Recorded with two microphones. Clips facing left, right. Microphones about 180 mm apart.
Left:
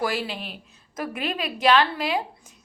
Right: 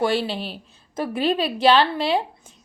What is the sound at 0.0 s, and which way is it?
A woman's voice, 30° right (ahead or behind).